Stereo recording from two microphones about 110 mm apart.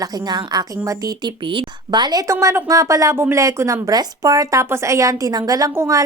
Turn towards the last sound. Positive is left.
turn(degrees=-30)  # may be behind; listen again after turning